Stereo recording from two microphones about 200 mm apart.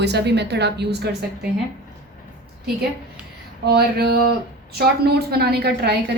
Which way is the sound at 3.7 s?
50° right (ahead or behind).